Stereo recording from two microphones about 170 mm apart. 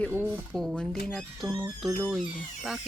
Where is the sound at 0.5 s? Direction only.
5° left (ahead or behind).